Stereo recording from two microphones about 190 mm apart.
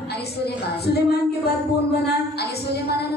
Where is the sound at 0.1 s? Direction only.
60° left (ahead or behind).